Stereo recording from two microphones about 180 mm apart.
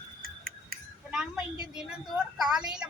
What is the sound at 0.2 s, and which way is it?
Cricket, 55° right (ahead or behind).